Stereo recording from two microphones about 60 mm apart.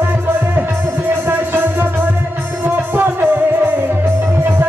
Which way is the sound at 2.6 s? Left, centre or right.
Right.